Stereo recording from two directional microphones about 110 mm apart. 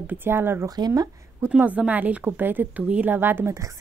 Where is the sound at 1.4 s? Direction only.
15° right (ahead or behind).